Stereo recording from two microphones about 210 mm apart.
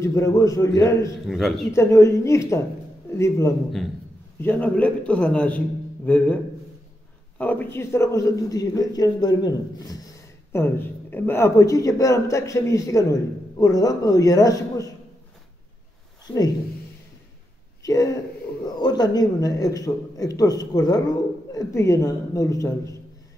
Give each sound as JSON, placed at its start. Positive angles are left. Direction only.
{"t": 0.0, "sound": "speech", "side_deg": 15}
{"t": 1.2, "sound": "speech", "side_deg": 0}
{"t": 1.7, "sound": "speech", "side_deg": 15}
{"t": 16.3, "sound": "speech", "side_deg": 5}
{"t": 17.8, "sound": "speech", "side_deg": 15}